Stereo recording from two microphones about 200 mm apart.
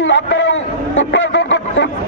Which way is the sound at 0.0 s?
65° left (ahead or behind).